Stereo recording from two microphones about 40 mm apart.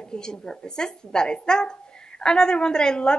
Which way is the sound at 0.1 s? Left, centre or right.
Centre.